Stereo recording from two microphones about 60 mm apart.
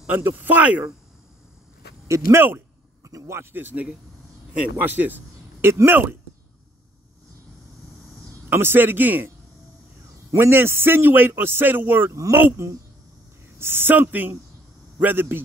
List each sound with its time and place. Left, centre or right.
0.1 s speech: right
2.0 s speech: right
2.3 s a man's voice: right
3.0 s a sound: right
3.5 s a man's voice: right
8.5 s a man's voice: right
10.3 s a man's voice: right
12.1 s speech: right
13.6 s a man's voice: right